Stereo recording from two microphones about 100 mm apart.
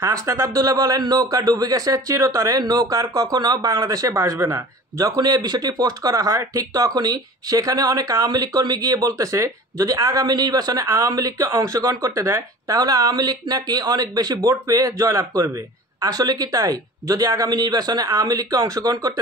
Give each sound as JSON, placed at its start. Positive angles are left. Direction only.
{"t": 0.0, "sound": "a man's voice", "side_deg": -35}